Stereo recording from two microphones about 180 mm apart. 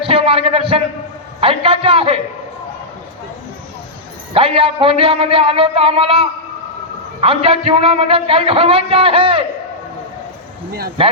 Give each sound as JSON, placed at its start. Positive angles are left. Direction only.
{"t": 0.0, "sound": "a man's voice", "side_deg": -30}
{"t": 1.4, "sound": "a sound", "side_deg": -30}
{"t": 4.4, "sound": "a man's voice", "side_deg": -30}